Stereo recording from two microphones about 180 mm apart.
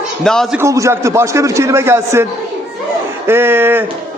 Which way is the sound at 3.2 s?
10° right (ahead or behind).